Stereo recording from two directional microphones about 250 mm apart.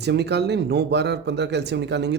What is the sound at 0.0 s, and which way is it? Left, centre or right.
Speech, right.